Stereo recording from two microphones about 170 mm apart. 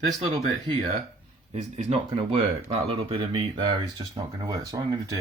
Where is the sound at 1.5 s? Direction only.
35° right (ahead or behind).